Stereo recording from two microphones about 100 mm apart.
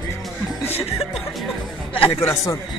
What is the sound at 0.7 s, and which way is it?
Chuckle, 85° left.